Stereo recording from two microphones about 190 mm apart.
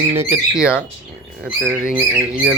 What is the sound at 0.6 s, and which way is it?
Speech, 5° right (ahead or behind).